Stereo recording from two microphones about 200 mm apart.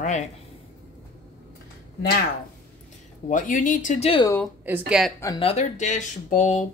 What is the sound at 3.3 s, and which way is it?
Speech, 40° left (ahead or behind).